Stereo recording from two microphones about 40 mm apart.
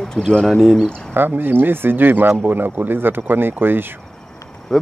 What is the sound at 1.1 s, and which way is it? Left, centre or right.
Speech, right.